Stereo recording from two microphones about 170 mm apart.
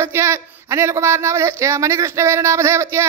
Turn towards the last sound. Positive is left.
turn(degrees=-15)  # may be behind; listen again after turning